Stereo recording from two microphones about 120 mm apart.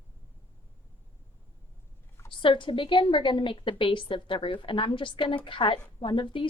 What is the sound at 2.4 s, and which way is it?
A woman's voice, 45° left (ahead or behind).